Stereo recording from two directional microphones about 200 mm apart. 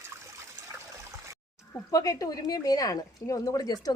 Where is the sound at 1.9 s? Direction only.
15° left (ahead or behind).